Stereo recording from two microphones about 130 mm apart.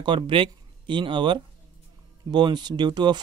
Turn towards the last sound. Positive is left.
turn(degrees=-35)  # may be behind; listen again after turning